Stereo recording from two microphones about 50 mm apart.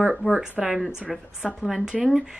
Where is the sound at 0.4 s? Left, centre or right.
Centre.